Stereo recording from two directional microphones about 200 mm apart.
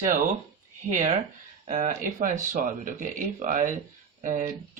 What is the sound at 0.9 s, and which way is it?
Speech, 40° right (ahead or behind).